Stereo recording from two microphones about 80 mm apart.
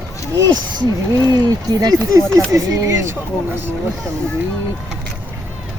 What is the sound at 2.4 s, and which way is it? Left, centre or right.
Speech, right.